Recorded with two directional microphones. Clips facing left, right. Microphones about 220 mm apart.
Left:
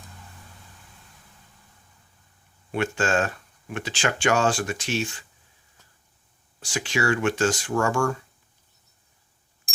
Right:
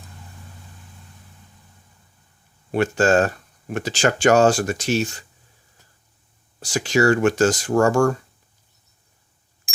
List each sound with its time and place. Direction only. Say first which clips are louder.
2.7 s speech: right 7 dB; 40° right (ahead or behind)
6.6 s speech: right 8 dB; 40° right (ahead or behind)